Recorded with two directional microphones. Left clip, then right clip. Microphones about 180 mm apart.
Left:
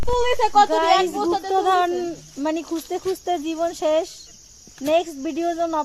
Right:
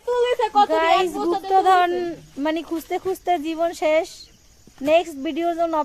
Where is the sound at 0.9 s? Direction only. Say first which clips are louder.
Left 1 dB; 50° left (ahead or behind).